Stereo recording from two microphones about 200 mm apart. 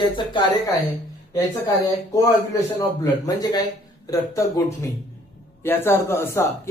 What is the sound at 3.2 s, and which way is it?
A man's voice, 20° left (ahead or behind).